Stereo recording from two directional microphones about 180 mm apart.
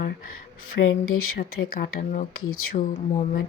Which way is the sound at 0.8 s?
65° left (ahead or behind).